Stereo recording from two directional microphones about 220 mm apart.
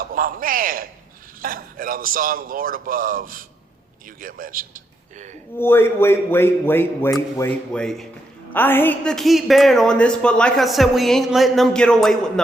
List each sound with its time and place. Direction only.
0.0 s a man's voice: 40° right (ahead or behind)
5.5 s a woman's voice: 10° left (ahead or behind)